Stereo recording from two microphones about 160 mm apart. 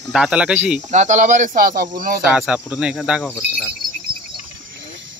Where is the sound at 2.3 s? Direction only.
5° right (ahead or behind).